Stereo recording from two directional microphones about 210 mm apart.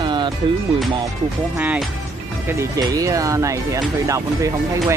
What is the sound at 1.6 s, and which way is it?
Speech, 5° right (ahead or behind).